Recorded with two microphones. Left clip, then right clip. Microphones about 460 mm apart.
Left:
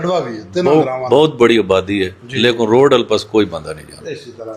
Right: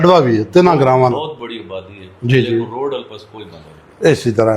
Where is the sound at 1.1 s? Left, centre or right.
Left.